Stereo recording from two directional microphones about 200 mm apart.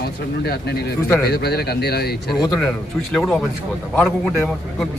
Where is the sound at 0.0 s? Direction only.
55° left (ahead or behind).